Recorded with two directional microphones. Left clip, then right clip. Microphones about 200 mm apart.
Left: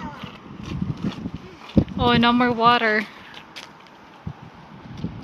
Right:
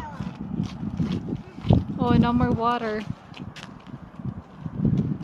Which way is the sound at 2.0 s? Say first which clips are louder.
Left 7 dB; centre (ahead or behind).